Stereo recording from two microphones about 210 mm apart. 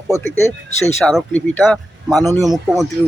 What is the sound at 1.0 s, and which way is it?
Speech, 5° left (ahead or behind).